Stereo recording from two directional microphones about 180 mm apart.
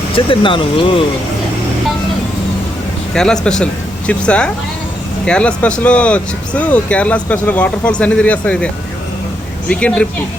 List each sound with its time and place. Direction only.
0.3 s speech: 30° left (ahead or behind)
3.2 s speech: 5° left (ahead or behind)